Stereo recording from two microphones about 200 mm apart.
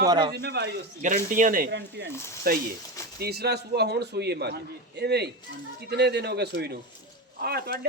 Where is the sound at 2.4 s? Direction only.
50° right (ahead or behind).